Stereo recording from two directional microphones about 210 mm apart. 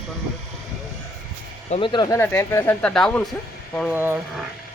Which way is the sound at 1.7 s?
20° left (ahead or behind).